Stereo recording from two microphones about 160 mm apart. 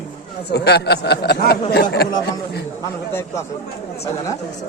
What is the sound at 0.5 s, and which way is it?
A man's voice, 90° left.